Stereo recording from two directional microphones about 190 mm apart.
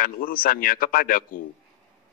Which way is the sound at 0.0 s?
50° left (ahead or behind).